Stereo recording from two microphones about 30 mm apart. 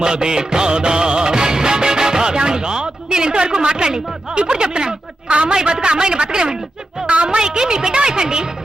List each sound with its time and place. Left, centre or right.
0.0 s music of bollywood: right
5.3 s a woman's voice: right
5.5 s a woman's voice: right